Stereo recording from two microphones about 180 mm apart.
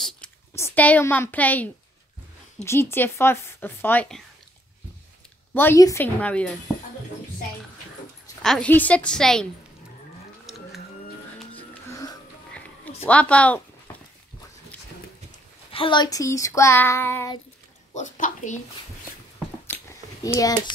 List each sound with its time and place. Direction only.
0.7 s speech: 10° left (ahead or behind)
5.5 s speech: 10° left (ahead or behind)
8.4 s a woman's voice: 5° left (ahead or behind)
10.5 s printer: centre (ahead or behind)
12.5 s a sound: 10° left (ahead or behind)
15.7 s speech: 30° left (ahead or behind)
17.9 s a woman's voice: 45° left (ahead or behind)
20.3 s a child's voice: 20° left (ahead or behind)